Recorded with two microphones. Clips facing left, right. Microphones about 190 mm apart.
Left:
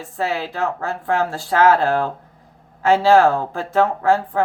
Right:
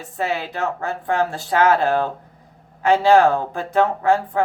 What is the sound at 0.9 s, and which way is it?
Speech, 20° right (ahead or behind).